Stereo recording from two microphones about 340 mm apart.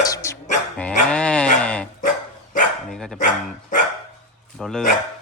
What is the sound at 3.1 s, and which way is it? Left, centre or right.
Speech, left.